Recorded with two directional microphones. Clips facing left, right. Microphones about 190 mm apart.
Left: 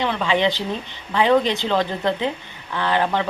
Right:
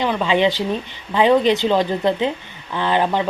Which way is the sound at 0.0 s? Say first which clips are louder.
Right 3 dB; 15° right (ahead or behind).